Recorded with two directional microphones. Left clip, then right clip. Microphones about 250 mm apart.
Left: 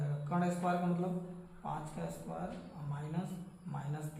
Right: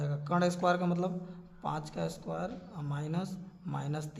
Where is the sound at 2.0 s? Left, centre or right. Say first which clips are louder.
Right 7 dB; right.